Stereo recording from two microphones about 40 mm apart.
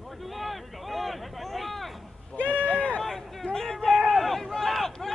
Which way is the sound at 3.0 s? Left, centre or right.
Centre.